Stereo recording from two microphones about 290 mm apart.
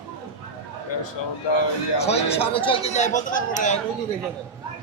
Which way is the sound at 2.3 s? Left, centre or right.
Centre.